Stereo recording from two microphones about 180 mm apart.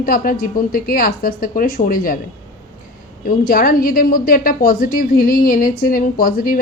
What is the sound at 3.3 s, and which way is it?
A woman's voice, 55° left (ahead or behind).